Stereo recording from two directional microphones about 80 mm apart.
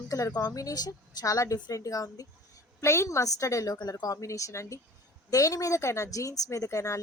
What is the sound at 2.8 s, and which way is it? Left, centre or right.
Speech, left.